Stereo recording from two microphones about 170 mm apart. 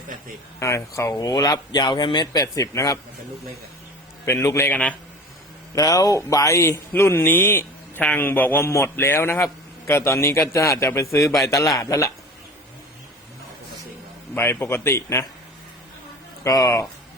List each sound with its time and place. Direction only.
0.6 s speech: 15° left (ahead or behind)
4.3 s speech: 15° left (ahead or behind)
5.7 s speech: 20° left (ahead or behind)
14.3 s speech: 15° left (ahead or behind)
16.4 s speech: 20° left (ahead or behind)